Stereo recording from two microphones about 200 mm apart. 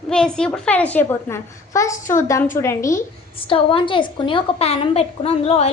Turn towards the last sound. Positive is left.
turn(degrees=30)  # may be behind; listen again after turning